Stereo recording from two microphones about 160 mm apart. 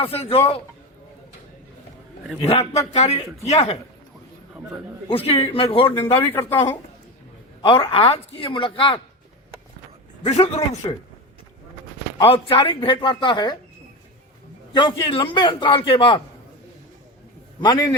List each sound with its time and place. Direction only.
0.0 s a man's voice: 35° left (ahead or behind)
2.5 s a man's voice: 40° left (ahead or behind)
5.0 s a man's voice: 35° left (ahead or behind)
7.6 s a man's voice: 30° left (ahead or behind)
10.2 s a man's voice: 40° left (ahead or behind)
10.8 s a man's voice: 30° left (ahead or behind)
12.2 s a man's voice: 35° left (ahead or behind)
14.7 s a man's voice: 30° left (ahead or behind)
17.6 s a man's voice: 25° left (ahead or behind)